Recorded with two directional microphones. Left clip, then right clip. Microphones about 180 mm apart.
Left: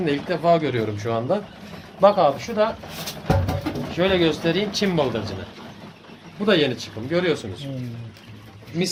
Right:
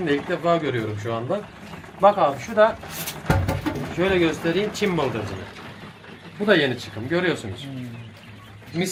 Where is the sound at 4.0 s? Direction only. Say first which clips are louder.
Left 1 dB; 45° left (ahead or behind).